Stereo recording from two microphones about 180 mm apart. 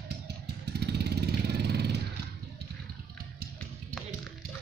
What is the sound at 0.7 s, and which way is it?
Vehicle, 65° right (ahead or behind).